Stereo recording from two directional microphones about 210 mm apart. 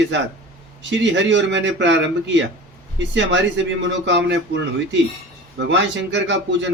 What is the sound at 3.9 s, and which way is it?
Speech, 60° right (ahead or behind).